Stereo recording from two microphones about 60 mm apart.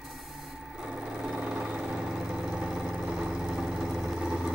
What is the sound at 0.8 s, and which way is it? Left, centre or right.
Vehicle, centre.